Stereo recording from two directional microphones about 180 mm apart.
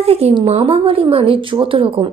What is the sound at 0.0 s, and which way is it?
Speech, 35° right (ahead or behind).